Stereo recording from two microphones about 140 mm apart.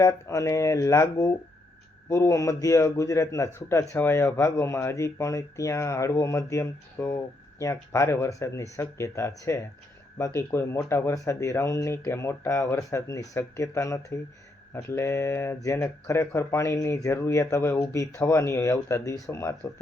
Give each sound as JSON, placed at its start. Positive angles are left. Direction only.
{"t": 0.0, "sound": "a man's voice", "side_deg": 25}